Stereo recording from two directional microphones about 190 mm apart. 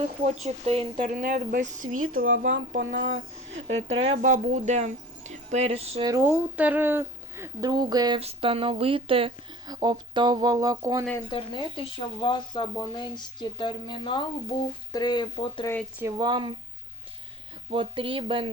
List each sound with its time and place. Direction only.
0.3 s speech: 35° right (ahead or behind)
2.2 s speech: 90° right
4.2 s speech: 45° right (ahead or behind)
6.1 s a woman's voice: 15° right (ahead or behind)
11.3 s speech: 25° left (ahead or behind)
16.0 s speech: 20° right (ahead or behind)
17.7 s speech: 25° right (ahead or behind)